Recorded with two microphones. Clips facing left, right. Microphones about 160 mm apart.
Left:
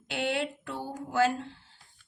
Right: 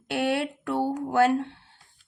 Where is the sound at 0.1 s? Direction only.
60° right (ahead or behind).